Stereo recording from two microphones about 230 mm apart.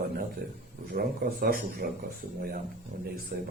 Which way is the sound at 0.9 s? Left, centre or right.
Right.